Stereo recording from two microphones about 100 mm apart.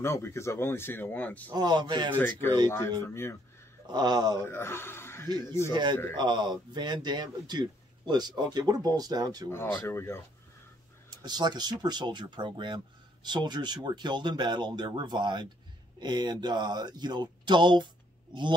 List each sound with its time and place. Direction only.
0.0 s speech: 30° left (ahead or behind)
1.5 s speech: 50° right (ahead or behind)
2.7 s speech: 25° left (ahead or behind)
3.8 s speech: 45° right (ahead or behind)
4.5 s speech: 25° left (ahead or behind)
5.7 s speech: 50° right (ahead or behind)
9.5 s speech: 25° left (ahead or behind)
11.1 s speech: 45° right (ahead or behind)